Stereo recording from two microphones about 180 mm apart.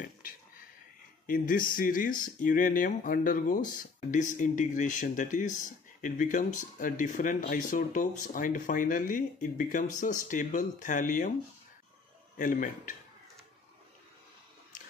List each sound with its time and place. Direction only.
1.2 s speech: 50° left (ahead or behind)
12.4 s speech: 45° left (ahead or behind)